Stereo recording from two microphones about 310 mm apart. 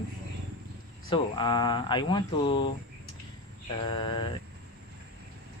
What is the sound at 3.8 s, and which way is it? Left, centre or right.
Speech, centre.